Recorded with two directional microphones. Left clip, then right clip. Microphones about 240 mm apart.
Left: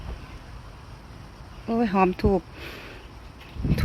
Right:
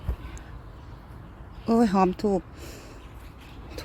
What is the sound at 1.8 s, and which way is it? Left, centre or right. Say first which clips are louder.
Speech: left 2 dB; centre.